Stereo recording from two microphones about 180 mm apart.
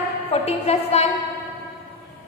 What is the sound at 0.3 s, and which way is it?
Speech, 35° left (ahead or behind).